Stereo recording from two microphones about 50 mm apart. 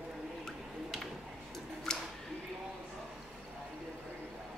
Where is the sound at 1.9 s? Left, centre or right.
Centre.